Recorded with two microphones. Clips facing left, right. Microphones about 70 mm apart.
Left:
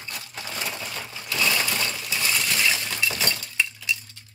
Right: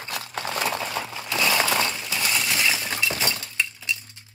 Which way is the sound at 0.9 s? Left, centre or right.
Right.